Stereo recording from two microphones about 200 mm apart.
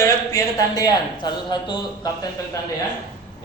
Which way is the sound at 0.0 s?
15° left (ahead or behind).